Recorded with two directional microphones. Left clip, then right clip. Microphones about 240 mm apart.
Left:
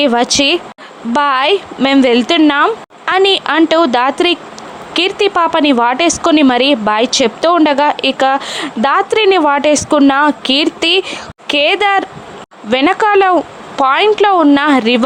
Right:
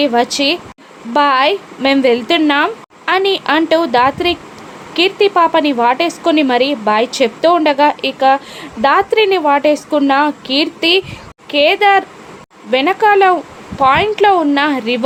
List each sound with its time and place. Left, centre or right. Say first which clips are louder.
0.0 s a woman's voice: left 2 dB; left